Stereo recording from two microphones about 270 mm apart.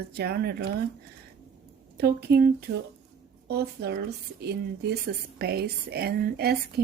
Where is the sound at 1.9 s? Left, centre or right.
Right.